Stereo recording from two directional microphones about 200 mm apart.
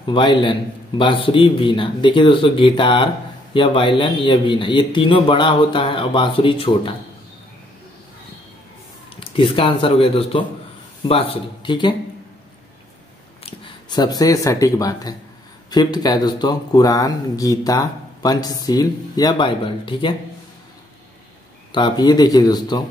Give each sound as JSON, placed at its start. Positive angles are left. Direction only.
{"t": 0.0, "sound": "speech", "side_deg": 25}
{"t": 9.1, "sound": "speech", "side_deg": 25}
{"t": 13.4, "sound": "speech", "side_deg": 25}
{"t": 21.7, "sound": "speech", "side_deg": 20}